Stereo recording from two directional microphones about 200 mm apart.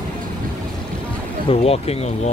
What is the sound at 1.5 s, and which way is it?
Speech, 30° left (ahead or behind).